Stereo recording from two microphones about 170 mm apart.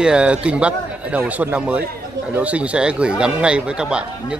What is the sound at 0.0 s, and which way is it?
A man's voice, 5° right (ahead or behind).